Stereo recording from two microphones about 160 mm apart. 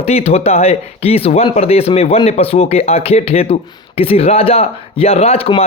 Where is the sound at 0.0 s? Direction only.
40° left (ahead or behind).